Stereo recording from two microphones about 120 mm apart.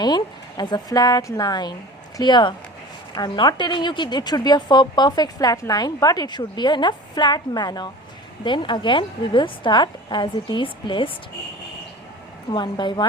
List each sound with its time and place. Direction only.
0.0 s a woman's voice: 35° left (ahead or behind)
12.5 s a woman's voice: 40° left (ahead or behind)